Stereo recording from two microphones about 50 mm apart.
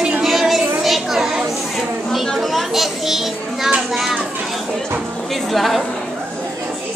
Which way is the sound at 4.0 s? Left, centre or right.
Centre.